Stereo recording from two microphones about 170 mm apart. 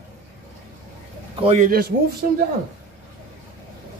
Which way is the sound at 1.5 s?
55° right (ahead or behind).